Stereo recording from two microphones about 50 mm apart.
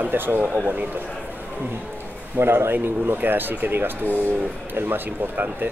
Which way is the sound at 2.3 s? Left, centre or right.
Right.